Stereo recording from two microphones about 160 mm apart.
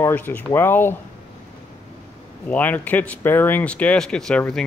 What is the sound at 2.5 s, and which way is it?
Speech, 10° left (ahead or behind).